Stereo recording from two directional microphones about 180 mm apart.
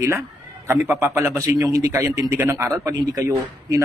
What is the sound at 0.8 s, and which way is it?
A man's voice, 10° right (ahead or behind).